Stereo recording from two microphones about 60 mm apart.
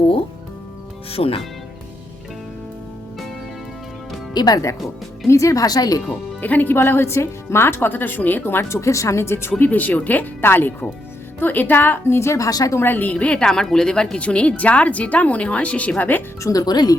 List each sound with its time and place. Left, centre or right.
5.3 s speech: left
6.1 s speech: left
6.7 s a woman's voice: left
8.7 s a woman's voice: left
10.4 s a woman's voice: left
12.0 s a woman's voice: left
12.5 s speech: left
12.8 s a woman's voice: left
13.1 s speech: centre
16.4 s speech: left